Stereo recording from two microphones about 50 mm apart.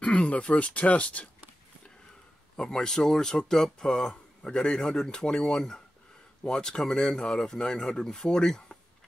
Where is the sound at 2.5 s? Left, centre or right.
Centre.